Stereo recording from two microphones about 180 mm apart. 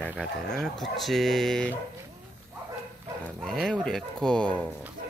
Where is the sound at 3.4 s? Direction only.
5° left (ahead or behind).